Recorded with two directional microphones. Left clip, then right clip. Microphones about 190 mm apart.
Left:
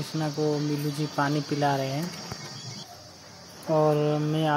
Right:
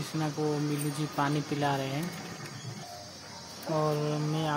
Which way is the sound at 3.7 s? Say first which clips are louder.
Left 7 dB; 15° left (ahead or behind).